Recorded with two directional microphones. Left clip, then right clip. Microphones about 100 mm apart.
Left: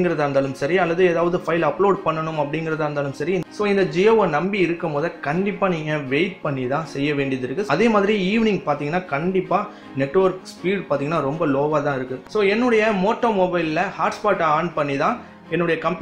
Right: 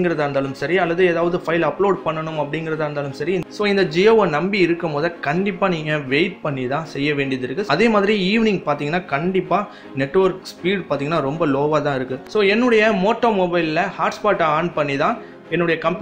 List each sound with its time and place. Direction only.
0.0 s a man's voice: 5° right (ahead or behind)